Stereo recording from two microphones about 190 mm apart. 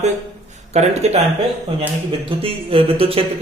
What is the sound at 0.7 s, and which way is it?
Speech, 35° right (ahead or behind).